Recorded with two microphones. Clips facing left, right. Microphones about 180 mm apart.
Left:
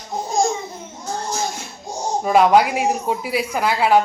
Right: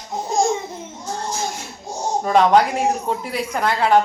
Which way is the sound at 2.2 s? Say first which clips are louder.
Left 1 dB; 10° left (ahead or behind).